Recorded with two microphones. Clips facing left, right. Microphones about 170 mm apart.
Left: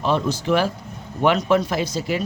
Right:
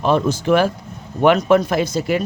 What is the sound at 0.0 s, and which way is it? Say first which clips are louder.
Speech: right 4 dB; 50° right (ahead or behind).